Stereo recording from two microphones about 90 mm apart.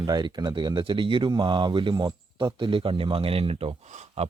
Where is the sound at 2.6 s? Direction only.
75° right (ahead or behind); by 3.7 s 90° right.